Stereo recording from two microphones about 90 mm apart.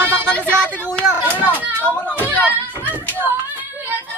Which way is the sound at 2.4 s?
20° right (ahead or behind).